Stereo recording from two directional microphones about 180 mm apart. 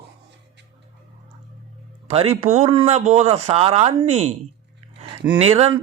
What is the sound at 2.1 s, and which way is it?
Speech, 35° right (ahead or behind).